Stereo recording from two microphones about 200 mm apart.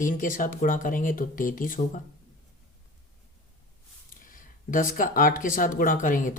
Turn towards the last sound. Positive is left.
turn(degrees=40)  # may be behind; listen again after turning